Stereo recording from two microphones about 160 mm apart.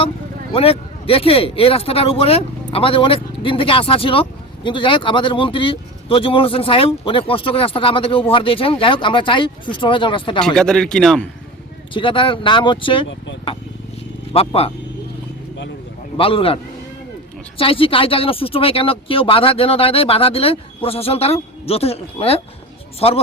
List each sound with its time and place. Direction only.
0.5 s speech: 35° left (ahead or behind)
10.4 s a man's voice: 5° left (ahead or behind)
11.9 s speech: 30° left (ahead or behind)
16.1 s speech: 35° left (ahead or behind)
17.6 s speech: 35° left (ahead or behind)